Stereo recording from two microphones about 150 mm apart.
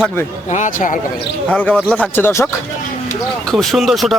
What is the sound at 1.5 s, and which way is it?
Speech, 10° left (ahead or behind).